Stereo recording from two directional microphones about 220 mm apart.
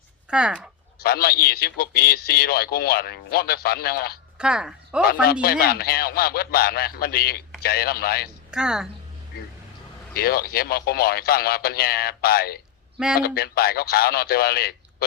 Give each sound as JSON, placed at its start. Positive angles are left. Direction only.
{"t": 0.3, "sound": "speech", "side_deg": -5}
{"t": 0.9, "sound": "a man's voice", "side_deg": 45}
{"t": 4.4, "sound": "speech", "side_deg": -5}
{"t": 5.2, "sound": "a man's voice", "side_deg": 45}
{"t": 8.4, "sound": "a woman's voice", "side_deg": -5}
{"t": 10.2, "sound": "a man's voice", "side_deg": 45}